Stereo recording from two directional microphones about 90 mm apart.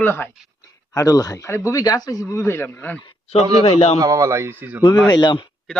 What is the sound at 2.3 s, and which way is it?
Speech, 25° left (ahead or behind).